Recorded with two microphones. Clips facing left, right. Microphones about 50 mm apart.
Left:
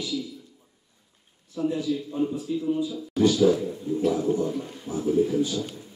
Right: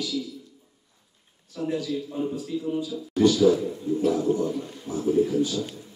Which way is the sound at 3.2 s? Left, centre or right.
Centre.